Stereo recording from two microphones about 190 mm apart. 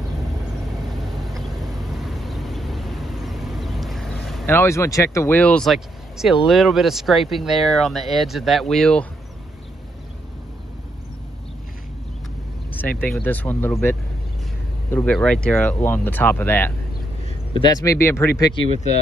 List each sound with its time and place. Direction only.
0.5 s vehicle: centre (ahead or behind)
4.5 s speech: 15° left (ahead or behind)
12.7 s speech: 10° left (ahead or behind)
17.6 s speech: 20° left (ahead or behind)